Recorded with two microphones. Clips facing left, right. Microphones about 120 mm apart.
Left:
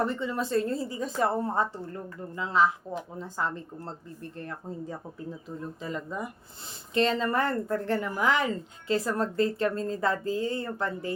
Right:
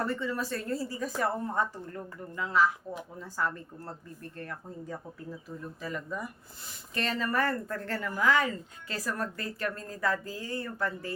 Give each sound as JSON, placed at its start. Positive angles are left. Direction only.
{"t": 0.0, "sound": "speech", "side_deg": 20}